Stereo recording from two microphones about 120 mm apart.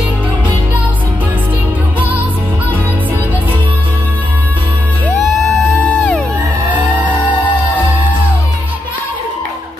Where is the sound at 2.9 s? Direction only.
15° right (ahead or behind).